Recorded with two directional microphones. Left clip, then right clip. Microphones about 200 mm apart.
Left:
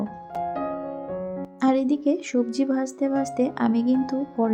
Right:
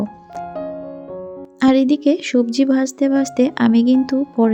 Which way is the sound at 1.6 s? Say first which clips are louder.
Right 7 dB; 35° right (ahead or behind).